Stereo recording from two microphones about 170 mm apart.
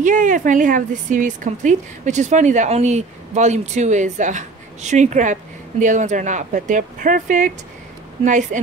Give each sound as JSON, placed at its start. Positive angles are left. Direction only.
{"t": 0.0, "sound": "speech", "side_deg": -50}